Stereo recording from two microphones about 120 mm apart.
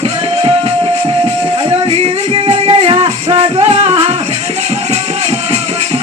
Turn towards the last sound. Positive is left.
turn(degrees=-50)  # may be behind; listen again after turning